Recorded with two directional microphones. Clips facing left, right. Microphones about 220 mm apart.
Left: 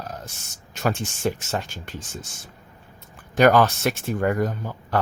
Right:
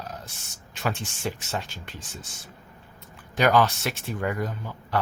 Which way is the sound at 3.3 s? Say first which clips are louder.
Left 5 dB; 50° left (ahead or behind).